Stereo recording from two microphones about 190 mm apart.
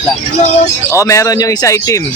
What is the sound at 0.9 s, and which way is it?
Speech, 15° left (ahead or behind).